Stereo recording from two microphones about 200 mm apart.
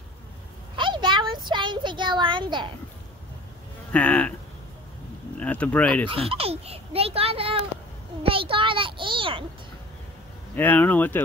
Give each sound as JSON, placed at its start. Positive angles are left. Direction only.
{"t": 0.7, "sound": "a sound", "side_deg": -25}
{"t": 3.9, "sound": "speech", "side_deg": 5}
{"t": 5.4, "sound": "speech", "side_deg": 5}
{"t": 6.0, "sound": "a child's voice", "side_deg": -30}
{"t": 10.5, "sound": "speech", "side_deg": 10}